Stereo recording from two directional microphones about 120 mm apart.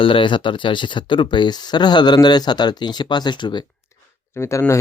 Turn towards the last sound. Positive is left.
turn(degrees=25)  # may be behind; listen again after turning